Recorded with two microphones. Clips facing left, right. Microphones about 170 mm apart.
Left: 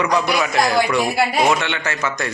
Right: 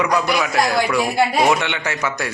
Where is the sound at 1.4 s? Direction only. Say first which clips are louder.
Even; 15° right (ahead or behind).